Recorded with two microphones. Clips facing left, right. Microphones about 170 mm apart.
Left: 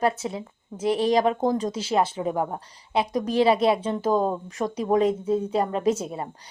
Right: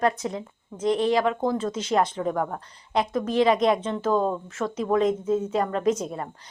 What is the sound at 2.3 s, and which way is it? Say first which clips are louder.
Speech: left 1 dB; 20° left (ahead or behind).